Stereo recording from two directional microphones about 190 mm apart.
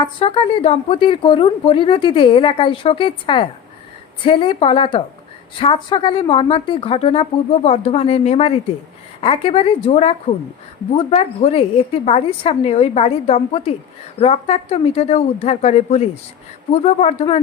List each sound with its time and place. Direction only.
0.0 s a woman's voice: 25° left (ahead or behind)